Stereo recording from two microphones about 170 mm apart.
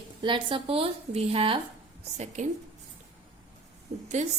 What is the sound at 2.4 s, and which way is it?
Speech, 45° right (ahead or behind).